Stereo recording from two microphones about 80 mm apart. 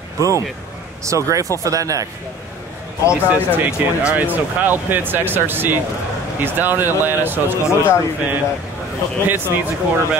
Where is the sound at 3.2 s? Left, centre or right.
Centre.